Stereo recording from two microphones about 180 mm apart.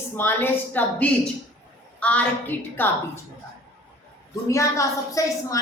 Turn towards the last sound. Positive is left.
turn(degrees=20)  # may be behind; listen again after turning